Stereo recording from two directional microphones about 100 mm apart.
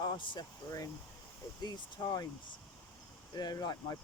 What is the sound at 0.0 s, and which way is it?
Speech, 50° left (ahead or behind).